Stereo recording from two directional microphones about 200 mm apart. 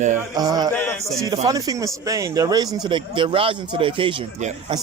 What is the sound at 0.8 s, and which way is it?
Speech, 10° left (ahead or behind).